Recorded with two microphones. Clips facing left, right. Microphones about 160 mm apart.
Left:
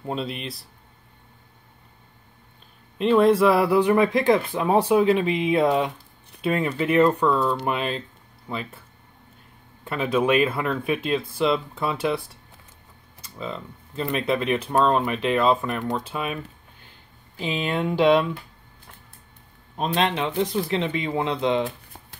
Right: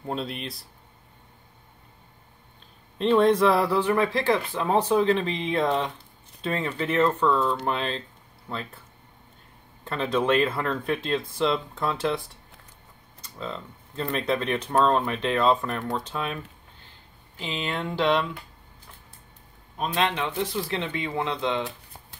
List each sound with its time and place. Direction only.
0.0 s speech: centre (ahead or behind)
3.0 s speech: 5° left (ahead or behind)
9.8 s speech: 10° left (ahead or behind)
13.2 s speech: 5° left (ahead or behind)
17.4 s speech: 15° left (ahead or behind)
19.8 s speech: 20° left (ahead or behind)